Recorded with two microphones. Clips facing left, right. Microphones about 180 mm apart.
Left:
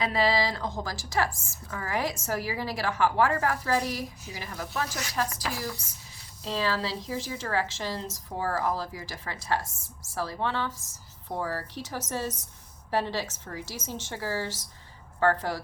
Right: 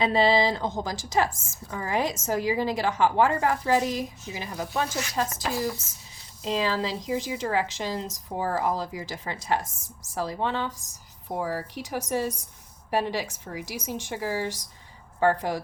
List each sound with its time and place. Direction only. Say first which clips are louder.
0.0 s a woman's voice: right 4 dB; 25° right (ahead or behind)